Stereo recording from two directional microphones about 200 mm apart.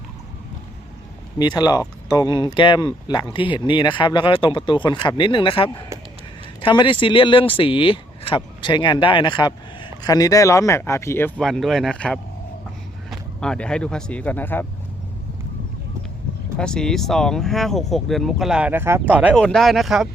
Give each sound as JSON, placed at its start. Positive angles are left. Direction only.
{"t": 1.4, "sound": "speech", "side_deg": 20}
{"t": 11.3, "sound": "speech", "side_deg": 0}
{"t": 16.6, "sound": "speech", "side_deg": 5}